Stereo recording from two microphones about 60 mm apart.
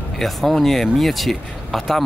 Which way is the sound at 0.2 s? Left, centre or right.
Centre.